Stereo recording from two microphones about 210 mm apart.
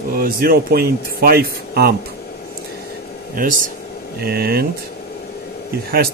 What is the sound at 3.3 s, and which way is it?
Speech, 40° right (ahead or behind).